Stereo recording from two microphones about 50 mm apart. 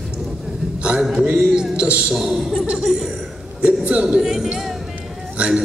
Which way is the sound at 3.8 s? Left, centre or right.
Right.